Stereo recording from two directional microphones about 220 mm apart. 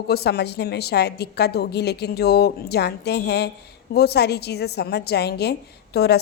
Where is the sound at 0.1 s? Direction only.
45° left (ahead or behind).